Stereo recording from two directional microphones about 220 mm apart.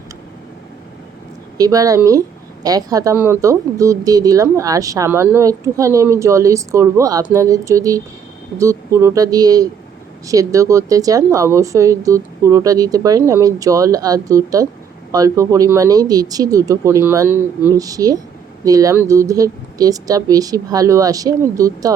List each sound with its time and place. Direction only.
1.5 s speech: 15° right (ahead or behind)